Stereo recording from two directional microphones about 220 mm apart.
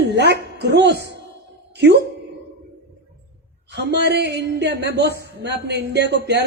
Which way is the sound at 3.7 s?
50° right (ahead or behind).